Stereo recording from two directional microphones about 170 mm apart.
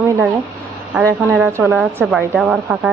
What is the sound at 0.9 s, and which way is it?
Speech, 15° right (ahead or behind).